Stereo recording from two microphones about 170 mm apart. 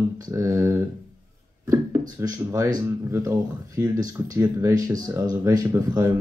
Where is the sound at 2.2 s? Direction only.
20° right (ahead or behind).